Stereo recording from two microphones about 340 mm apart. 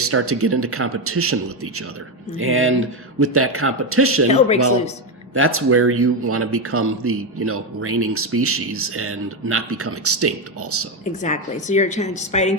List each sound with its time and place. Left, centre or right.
0.0 s speech: right
4.3 s a woman's voice: centre
5.3 s speech: right
11.0 s a woman's voice: left